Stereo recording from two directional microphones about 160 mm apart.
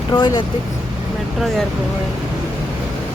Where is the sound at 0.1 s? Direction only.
25° left (ahead or behind).